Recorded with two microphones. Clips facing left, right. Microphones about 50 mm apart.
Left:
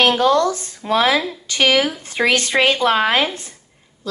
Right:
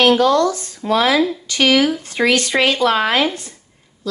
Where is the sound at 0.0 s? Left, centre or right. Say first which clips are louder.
Right 2 dB; left.